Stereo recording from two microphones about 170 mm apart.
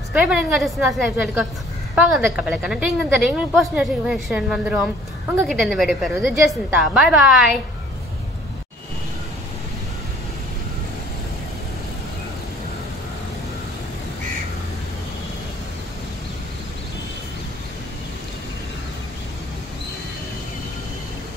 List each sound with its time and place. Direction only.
0.1 s a woman's voice: 5° right (ahead or behind)